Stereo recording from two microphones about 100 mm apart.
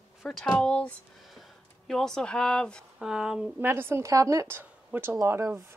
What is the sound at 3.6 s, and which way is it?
Speech, 25° right (ahead or behind).